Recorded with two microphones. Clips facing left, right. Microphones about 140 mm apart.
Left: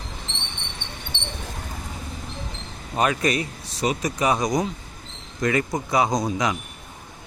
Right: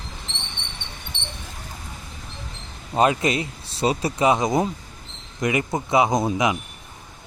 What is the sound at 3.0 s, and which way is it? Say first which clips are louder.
Speech: right 2 dB; 25° right (ahead or behind).